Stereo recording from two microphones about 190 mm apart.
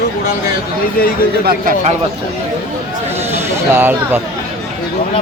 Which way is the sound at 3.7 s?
10° right (ahead or behind).